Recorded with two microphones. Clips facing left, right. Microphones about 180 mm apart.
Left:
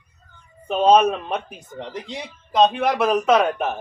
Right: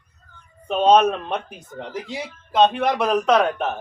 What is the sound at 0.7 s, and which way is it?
A man's voice, 5° left (ahead or behind).